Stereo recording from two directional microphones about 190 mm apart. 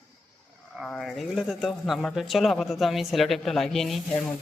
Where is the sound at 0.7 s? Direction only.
Centre (ahead or behind).